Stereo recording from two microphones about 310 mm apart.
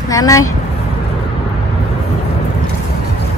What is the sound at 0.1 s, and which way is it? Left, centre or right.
Speech, centre.